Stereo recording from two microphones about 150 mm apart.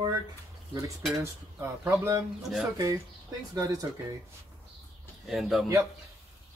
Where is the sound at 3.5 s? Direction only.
25° right (ahead or behind).